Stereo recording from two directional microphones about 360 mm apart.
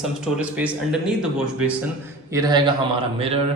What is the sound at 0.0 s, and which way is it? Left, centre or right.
Speech, centre.